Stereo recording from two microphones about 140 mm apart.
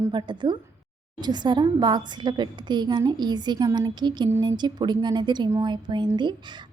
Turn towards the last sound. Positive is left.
turn(degrees=-35)  # may be behind; listen again after turning